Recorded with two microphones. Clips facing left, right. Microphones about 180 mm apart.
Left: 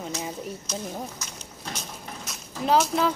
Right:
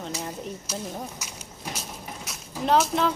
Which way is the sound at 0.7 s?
5° right (ahead or behind).